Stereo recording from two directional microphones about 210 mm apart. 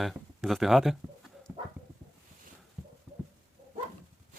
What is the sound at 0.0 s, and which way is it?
Speech, centre (ahead or behind).